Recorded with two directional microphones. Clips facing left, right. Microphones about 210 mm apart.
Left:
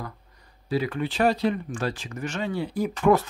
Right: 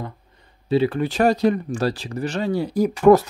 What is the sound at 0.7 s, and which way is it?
Speech, 30° right (ahead or behind).